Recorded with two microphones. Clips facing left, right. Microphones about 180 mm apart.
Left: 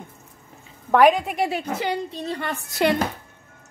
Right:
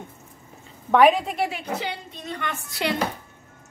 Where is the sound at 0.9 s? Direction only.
Centre (ahead or behind).